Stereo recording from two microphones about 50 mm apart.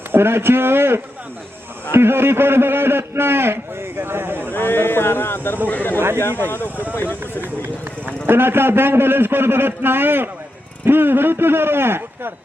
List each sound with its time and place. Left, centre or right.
0.1 s a man's voice: right
1.9 s a sound: right
4.5 s speech: left
5.6 s speech: left
7.4 s a man's voice: right